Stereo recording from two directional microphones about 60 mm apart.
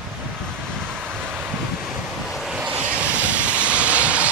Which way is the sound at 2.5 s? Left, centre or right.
Centre.